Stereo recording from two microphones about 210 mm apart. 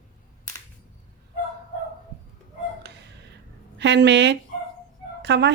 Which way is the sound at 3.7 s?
55° right (ahead or behind).